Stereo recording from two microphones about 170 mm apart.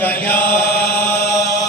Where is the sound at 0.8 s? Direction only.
70° left (ahead or behind).